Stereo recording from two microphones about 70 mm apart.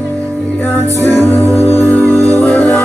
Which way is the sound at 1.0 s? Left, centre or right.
Left.